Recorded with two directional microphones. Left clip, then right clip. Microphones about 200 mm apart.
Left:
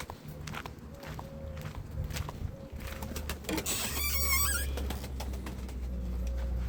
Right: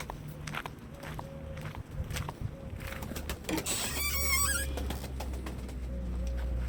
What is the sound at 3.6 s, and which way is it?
Music, 40° left (ahead or behind).